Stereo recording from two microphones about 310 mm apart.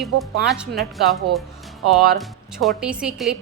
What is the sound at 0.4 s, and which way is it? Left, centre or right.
A woman's voice, centre.